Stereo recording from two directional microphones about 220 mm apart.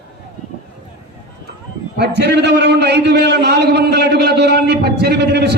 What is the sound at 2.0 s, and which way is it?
A man's voice, 50° right (ahead or behind).